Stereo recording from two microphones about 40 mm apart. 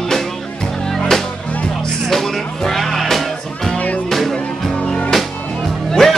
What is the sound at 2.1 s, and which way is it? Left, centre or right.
Music, centre.